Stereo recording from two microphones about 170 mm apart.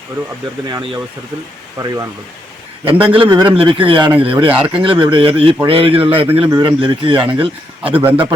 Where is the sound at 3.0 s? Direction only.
30° right (ahead or behind).